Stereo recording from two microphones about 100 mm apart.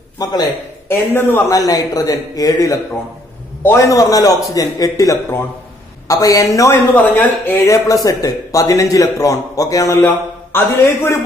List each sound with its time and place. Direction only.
0.2 s a man's voice: 40° left (ahead or behind)
0.8 s a man's voice: 25° left (ahead or behind)
1.5 s a man's voice: 40° left (ahead or behind)
6.9 s a man's voice: 20° left (ahead or behind)
7.6 s a man's voice: 35° left (ahead or behind)
9.9 s a man's voice: 20° left (ahead or behind)